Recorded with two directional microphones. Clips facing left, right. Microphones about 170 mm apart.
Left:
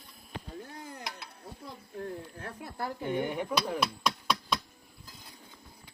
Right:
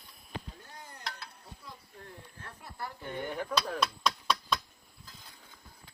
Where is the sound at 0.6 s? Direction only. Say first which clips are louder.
Left 6 dB; 65° left (ahead or behind).